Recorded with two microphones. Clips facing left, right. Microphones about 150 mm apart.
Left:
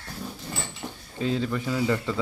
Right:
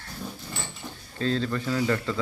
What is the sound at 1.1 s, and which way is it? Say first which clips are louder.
Speech: even; 15° left (ahead or behind).